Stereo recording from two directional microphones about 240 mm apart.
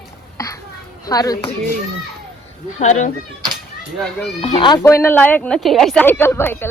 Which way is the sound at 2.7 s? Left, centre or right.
Left.